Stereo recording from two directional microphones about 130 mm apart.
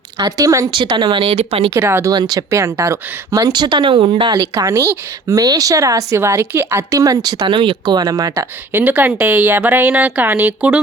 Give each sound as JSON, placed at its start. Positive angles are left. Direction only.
{"t": 0.2, "sound": "speech", "side_deg": -25}
{"t": 0.7, "sound": "speech", "side_deg": -40}
{"t": 1.7, "sound": "speech", "side_deg": -20}
{"t": 2.1, "sound": "speech", "side_deg": -35}
{"t": 2.5, "sound": "speech", "side_deg": -25}
{"t": 4.5, "sound": "speech", "side_deg": -20}
{"t": 8.8, "sound": "a woman's voice", "side_deg": -15}